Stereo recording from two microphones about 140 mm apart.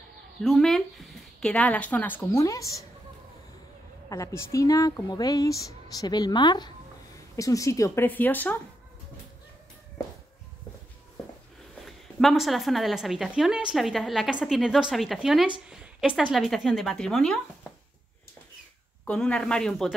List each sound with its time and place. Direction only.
0.4 s speech: 5° left (ahead or behind)
2.4 s speech: 25° left (ahead or behind)
4.1 s speech: 20° left (ahead or behind)
11.8 s speech: centre (ahead or behind)
19.0 s speech: 10° left (ahead or behind)